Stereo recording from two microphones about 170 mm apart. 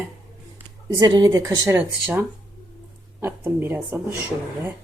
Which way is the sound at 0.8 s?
25° right (ahead or behind).